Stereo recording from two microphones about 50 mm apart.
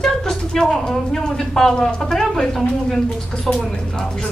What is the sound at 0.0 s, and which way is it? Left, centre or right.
A woman's voice, centre.